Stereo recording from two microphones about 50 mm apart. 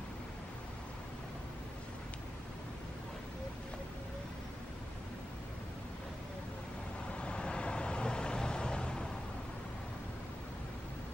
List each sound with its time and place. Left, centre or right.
7.1 s vehicle: left